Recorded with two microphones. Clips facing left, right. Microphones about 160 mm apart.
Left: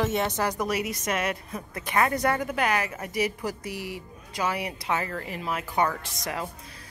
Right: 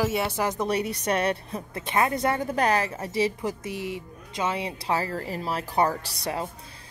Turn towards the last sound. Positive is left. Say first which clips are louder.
# right 2 dB
turn(degrees=-30)  # may be behind; listen again after turning